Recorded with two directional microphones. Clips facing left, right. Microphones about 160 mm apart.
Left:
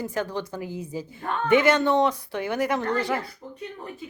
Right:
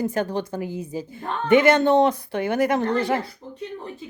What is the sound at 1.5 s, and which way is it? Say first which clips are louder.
Speech: right 4 dB; 50° right (ahead or behind).